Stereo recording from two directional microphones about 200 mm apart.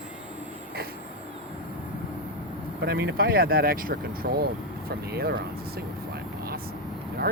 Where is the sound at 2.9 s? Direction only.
50° right (ahead or behind).